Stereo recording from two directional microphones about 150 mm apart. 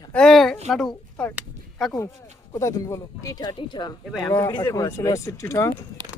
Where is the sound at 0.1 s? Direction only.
5° left (ahead or behind).